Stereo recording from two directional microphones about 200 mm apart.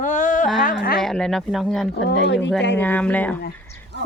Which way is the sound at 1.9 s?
55° left (ahead or behind).